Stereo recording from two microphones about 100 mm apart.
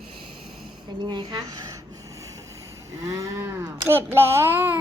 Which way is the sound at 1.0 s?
45° right (ahead or behind).